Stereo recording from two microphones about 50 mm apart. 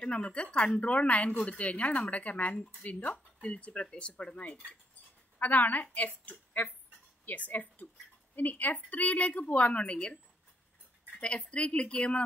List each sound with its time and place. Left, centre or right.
0.0 s a woman's voice: left
5.4 s a woman's voice: left
11.1 s a woman's voice: left